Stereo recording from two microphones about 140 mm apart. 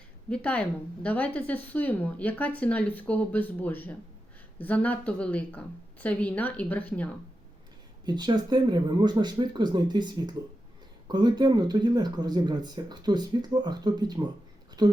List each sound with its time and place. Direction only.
0.3 s speech: 10° left (ahead or behind)
8.0 s speech: 30° right (ahead or behind)